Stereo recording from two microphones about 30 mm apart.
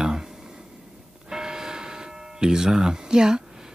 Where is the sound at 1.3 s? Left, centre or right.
Centre.